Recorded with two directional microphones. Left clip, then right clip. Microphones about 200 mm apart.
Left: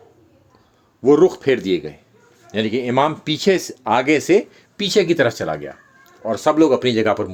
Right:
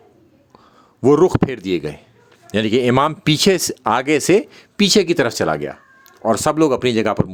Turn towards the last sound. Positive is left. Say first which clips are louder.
# even
turn(degrees=-25)  # may be behind; listen again after turning